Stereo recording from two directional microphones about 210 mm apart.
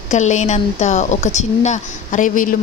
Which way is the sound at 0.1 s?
35° left (ahead or behind).